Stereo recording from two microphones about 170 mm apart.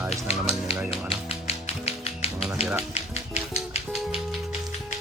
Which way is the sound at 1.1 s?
35° left (ahead or behind).